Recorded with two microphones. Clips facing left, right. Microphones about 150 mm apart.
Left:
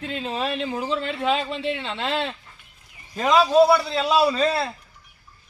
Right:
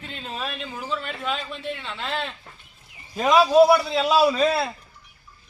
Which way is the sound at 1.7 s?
25° left (ahead or behind).